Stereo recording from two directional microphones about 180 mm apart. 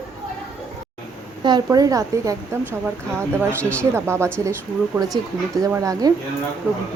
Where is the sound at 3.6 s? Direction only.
5° left (ahead or behind).